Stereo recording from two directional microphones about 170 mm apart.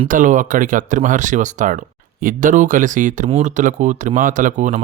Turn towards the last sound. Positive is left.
turn(degrees=-45)  # may be behind; listen again after turning